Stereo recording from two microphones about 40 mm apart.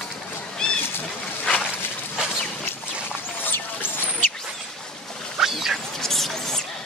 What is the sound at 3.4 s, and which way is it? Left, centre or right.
Rodents, left.